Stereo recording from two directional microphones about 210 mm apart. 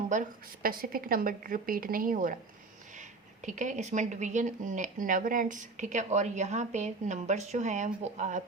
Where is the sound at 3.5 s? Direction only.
35° right (ahead or behind).